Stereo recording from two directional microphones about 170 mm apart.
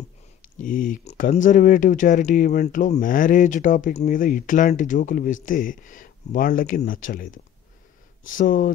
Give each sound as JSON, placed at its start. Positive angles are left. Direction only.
{"t": 0.6, "sound": "speech", "side_deg": 50}